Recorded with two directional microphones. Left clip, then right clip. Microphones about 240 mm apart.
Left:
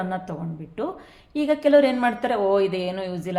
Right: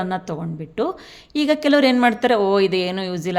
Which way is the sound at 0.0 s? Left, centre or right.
Right.